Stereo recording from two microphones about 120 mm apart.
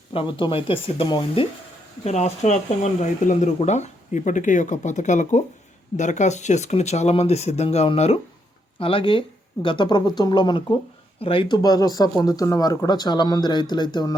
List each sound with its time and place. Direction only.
0.1 s speech: 45° left (ahead or behind)
2.0 s speech: 70° left (ahead or behind)
8.8 s speech: 50° left (ahead or behind)